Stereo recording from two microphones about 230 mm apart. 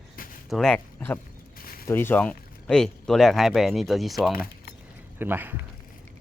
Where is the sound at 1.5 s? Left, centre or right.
Left.